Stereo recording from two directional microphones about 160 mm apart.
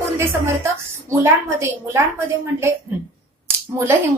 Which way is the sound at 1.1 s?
15° right (ahead or behind).